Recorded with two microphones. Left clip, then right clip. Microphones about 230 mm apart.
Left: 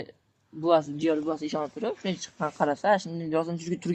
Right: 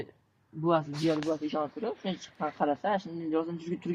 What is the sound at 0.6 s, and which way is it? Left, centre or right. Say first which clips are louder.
Speech: left 5 dB; left.